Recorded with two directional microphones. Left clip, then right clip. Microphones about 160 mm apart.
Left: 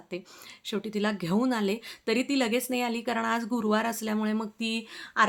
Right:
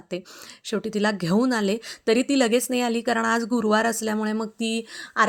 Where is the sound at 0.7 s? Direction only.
40° right (ahead or behind).